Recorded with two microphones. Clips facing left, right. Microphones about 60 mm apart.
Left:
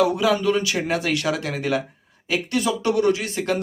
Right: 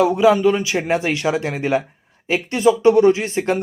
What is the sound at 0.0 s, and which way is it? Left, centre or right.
Speech, right.